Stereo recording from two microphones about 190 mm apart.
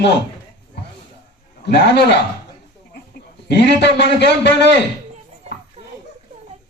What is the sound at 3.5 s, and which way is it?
A man's voice, 65° left (ahead or behind).